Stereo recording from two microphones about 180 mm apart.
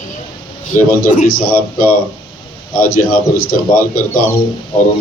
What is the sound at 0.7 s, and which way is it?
Speech, 45° left (ahead or behind).